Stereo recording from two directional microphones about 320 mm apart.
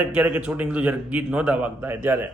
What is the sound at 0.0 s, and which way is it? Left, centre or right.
A man's voice, centre.